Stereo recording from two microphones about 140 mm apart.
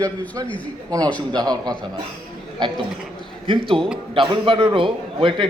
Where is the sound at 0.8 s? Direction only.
25° right (ahead or behind).